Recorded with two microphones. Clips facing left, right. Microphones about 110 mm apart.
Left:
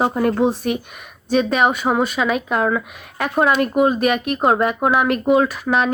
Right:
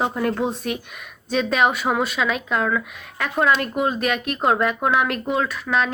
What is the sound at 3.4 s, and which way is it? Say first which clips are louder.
A woman's voice: left 4 dB; 5° left (ahead or behind).